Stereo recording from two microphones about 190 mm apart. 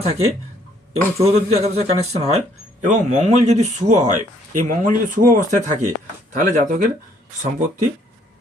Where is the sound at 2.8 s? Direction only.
40° right (ahead or behind).